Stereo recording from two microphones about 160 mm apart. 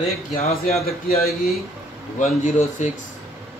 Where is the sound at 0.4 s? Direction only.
40° left (ahead or behind).